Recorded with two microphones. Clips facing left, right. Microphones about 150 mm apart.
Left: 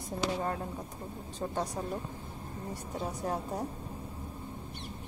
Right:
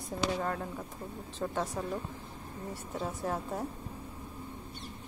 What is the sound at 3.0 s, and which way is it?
Speech, 20° left (ahead or behind).